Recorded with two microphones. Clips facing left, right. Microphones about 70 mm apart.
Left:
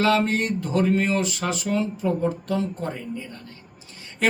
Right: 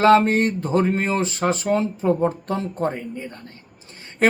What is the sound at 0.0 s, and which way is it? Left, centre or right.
Speech, right.